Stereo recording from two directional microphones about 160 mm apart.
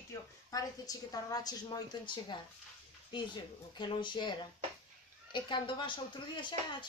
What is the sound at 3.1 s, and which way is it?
Speech, 30° left (ahead or behind).